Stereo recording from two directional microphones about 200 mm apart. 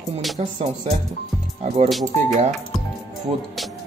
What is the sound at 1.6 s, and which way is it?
Speech, 30° right (ahead or behind).